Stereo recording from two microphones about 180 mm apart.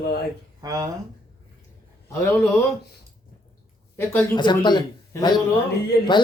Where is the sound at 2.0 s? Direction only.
15° left (ahead or behind).